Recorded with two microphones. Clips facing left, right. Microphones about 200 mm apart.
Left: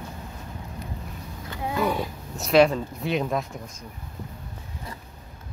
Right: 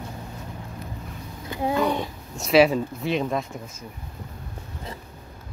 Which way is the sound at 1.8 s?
5° left (ahead or behind).